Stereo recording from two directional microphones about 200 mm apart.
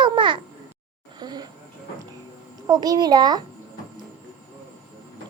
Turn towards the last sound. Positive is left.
turn(degrees=-20)  # may be behind; listen again after turning